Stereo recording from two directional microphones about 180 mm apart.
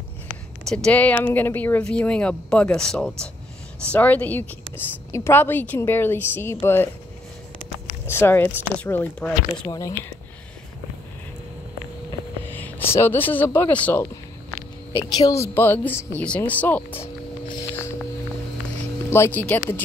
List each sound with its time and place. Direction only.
0.8 s a woman's voice: 10° left (ahead or behind)
8.1 s a woman's voice: 10° left (ahead or behind)
9.5 s speech: 20° left (ahead or behind)
12.4 s a woman's voice: 10° left (ahead or behind)
16.9 s vehicle: 30° left (ahead or behind)
19.0 s a woman's voice: 15° left (ahead or behind)